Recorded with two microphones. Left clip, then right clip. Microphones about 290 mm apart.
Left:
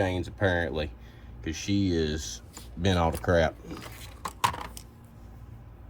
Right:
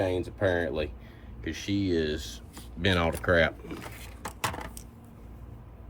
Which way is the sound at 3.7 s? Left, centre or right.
Centre.